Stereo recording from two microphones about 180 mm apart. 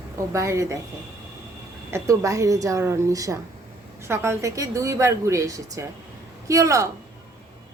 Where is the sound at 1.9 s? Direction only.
15° right (ahead or behind).